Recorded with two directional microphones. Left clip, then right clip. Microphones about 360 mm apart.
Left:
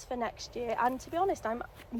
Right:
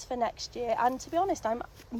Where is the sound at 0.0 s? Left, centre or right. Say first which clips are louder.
Right 4 dB; right.